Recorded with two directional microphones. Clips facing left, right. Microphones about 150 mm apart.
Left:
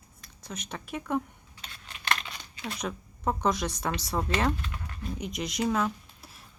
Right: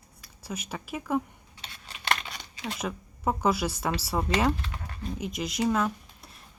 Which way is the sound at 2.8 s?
5° right (ahead or behind).